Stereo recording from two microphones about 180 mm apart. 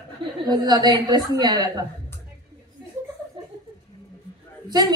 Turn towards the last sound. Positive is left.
turn(degrees=-25)  # may be behind; listen again after turning